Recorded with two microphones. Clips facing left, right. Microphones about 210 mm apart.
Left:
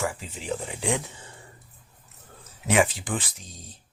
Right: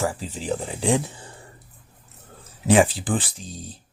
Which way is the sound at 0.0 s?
35° right (ahead or behind).